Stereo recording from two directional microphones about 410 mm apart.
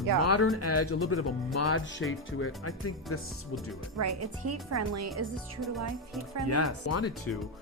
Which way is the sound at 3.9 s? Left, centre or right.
Right.